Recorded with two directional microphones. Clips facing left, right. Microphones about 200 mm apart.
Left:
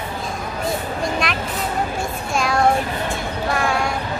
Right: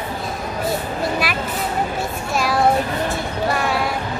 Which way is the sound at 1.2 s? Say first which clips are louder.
Even; 5° right (ahead or behind).